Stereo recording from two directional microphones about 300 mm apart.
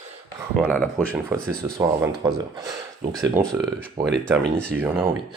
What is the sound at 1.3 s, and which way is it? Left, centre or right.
Speech, centre.